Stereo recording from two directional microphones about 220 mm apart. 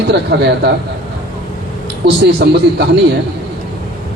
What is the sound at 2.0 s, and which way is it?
Speech, 50° right (ahead or behind).